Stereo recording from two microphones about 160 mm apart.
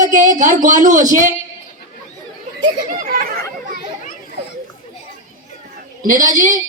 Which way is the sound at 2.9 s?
65° right (ahead or behind).